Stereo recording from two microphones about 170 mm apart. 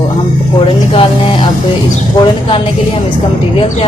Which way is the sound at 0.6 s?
30° left (ahead or behind).